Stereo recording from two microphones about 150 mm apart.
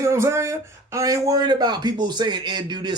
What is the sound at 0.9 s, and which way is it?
A man's voice, 25° right (ahead or behind).